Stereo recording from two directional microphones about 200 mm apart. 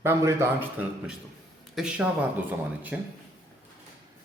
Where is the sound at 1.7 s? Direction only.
5° right (ahead or behind).